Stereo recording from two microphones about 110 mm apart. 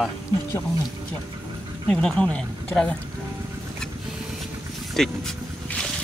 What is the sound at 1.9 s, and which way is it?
Speech, 5° left (ahead or behind).